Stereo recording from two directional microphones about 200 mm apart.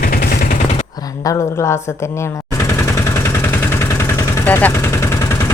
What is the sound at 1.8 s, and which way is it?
Machine gun, 15° left (ahead or behind).